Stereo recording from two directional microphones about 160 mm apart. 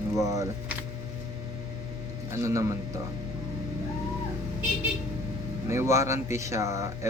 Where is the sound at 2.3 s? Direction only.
20° right (ahead or behind).